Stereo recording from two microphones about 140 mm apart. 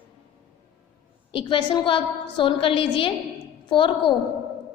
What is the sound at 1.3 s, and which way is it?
A woman's voice, 35° left (ahead or behind).